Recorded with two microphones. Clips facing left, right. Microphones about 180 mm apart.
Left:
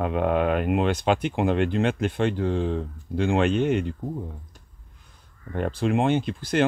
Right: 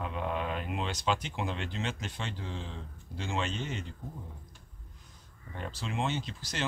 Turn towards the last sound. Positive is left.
turn(degrees=55)  # may be behind; listen again after turning